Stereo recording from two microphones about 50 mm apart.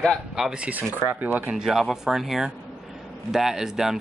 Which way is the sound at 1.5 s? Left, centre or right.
Centre.